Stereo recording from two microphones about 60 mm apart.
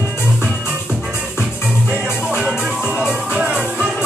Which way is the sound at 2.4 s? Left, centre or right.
Centre.